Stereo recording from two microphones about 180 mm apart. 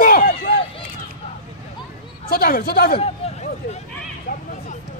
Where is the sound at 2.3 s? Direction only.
55° left (ahead or behind).